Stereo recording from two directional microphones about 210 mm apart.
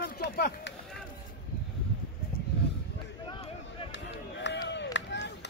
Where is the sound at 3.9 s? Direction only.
60° left (ahead or behind).